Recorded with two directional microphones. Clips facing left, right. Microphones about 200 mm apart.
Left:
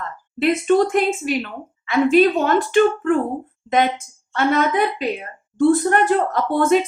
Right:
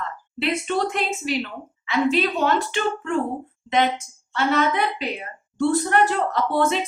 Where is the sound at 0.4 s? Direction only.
45° left (ahead or behind).